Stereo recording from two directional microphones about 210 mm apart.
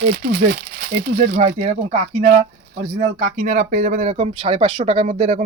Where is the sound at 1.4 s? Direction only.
30° right (ahead or behind).